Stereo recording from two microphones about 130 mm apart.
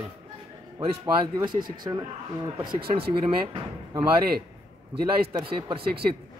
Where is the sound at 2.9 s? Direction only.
40° right (ahead or behind).